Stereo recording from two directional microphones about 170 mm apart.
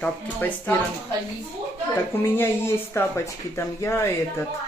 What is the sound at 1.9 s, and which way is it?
Speech, 15° left (ahead or behind).